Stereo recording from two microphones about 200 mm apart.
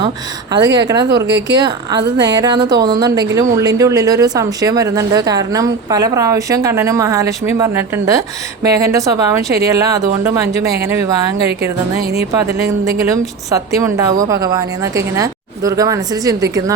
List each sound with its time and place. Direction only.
0.6 s a woman's voice: 20° right (ahead or behind)
1.1 s speech: 60° right (ahead or behind)
1.5 s a woman's voice: 20° right (ahead or behind)
11.9 s speech: 50° right (ahead or behind)
12.3 s a woman's voice: 15° right (ahead or behind)